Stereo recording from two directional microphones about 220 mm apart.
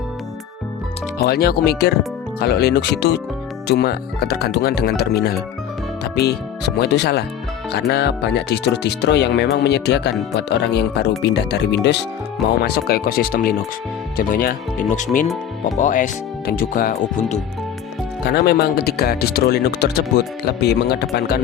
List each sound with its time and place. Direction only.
1.2 s speech: 45° left (ahead or behind)
18.3 s speech: 45° left (ahead or behind)